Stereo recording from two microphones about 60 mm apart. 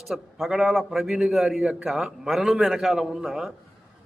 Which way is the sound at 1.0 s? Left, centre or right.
Centre.